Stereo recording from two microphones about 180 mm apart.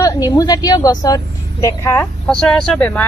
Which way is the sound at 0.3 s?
20° left (ahead or behind).